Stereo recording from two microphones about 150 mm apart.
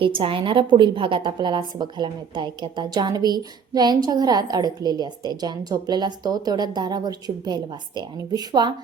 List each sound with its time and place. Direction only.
0.0 s a woman's voice: 35° right (ahead or behind)